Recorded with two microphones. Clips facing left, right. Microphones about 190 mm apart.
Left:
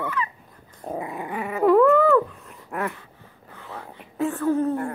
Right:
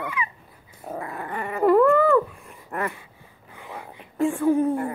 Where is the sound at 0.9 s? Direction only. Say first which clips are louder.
Left 2 dB; 15° left (ahead or behind).